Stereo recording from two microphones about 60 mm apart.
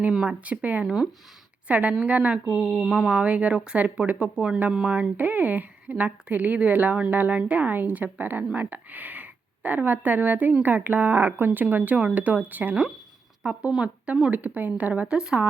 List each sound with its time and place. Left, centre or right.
0.3 s speech: right
2.5 s a sound: centre
3.2 s speech: right